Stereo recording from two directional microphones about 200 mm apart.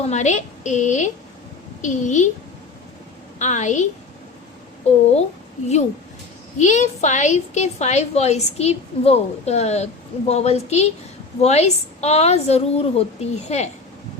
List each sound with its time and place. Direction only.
0.0 s a woman's voice: 35° left (ahead or behind)
3.3 s a woman's voice: 35° left (ahead or behind)
4.9 s a woman's voice: 30° left (ahead or behind)
6.6 s a woman's voice: 35° left (ahead or behind)